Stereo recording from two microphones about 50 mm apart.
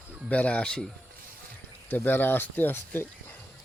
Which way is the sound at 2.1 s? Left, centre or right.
Left.